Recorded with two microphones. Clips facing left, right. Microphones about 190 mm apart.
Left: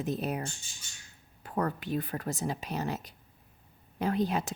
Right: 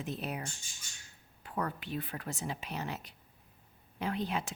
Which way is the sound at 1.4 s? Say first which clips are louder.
Left 5 dB; 45° left (ahead or behind).